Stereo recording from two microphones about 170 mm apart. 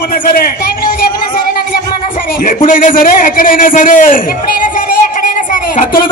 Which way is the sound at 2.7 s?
55° left (ahead or behind).